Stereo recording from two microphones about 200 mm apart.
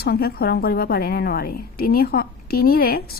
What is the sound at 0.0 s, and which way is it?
A woman's voice, 50° left (ahead or behind).